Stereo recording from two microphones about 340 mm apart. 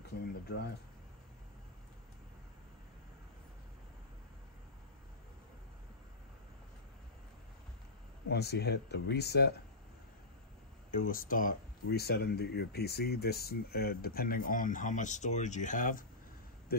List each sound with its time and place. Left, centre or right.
0.5 s speech: left
8.3 s speech: left
10.9 s speech: left